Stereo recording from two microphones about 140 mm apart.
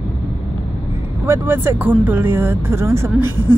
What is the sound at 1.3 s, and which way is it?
A woman's voice, 15° right (ahead or behind).